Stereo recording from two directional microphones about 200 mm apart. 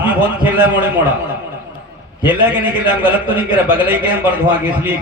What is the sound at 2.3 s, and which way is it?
A man's voice, 10° right (ahead or behind).